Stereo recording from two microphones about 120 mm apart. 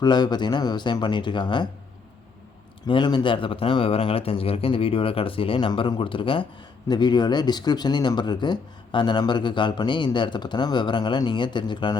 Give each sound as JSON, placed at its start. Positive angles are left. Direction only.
{"t": 0.0, "sound": "speech", "side_deg": 35}
{"t": 2.8, "sound": "speech", "side_deg": 40}